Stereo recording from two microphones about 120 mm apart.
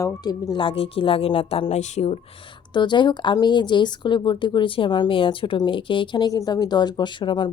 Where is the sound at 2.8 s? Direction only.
40° left (ahead or behind).